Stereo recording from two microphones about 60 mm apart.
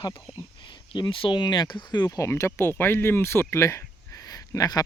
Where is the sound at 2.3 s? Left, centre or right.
Left.